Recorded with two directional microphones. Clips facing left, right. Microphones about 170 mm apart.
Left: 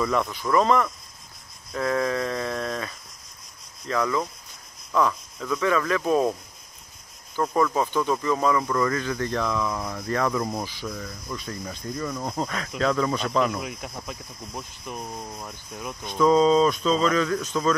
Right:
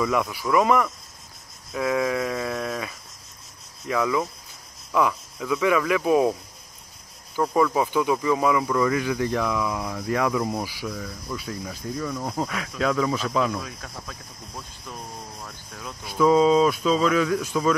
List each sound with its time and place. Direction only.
0.0 s speech: 5° right (ahead or behind)
1.7 s a sound: 10° right (ahead or behind)
3.8 s speech: 10° right (ahead or behind)
7.3 s speech: 5° right (ahead or behind)
13.6 s speech: 15° left (ahead or behind)
16.0 s speech: 5° right (ahead or behind)